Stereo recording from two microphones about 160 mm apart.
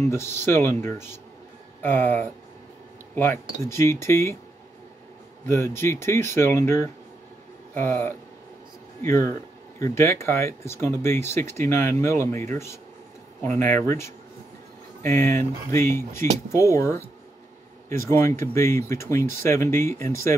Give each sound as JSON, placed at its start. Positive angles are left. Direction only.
{"t": 0.1, "sound": "speech", "side_deg": 15}
{"t": 5.5, "sound": "speech", "side_deg": 15}